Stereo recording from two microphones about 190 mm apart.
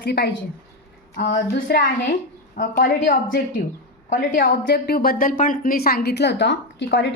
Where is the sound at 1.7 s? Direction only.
55° left (ahead or behind).